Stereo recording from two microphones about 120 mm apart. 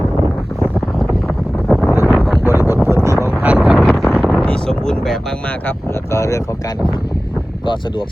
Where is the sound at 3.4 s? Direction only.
5° right (ahead or behind).